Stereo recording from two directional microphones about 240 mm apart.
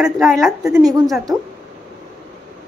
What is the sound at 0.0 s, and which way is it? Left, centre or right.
Speech, centre.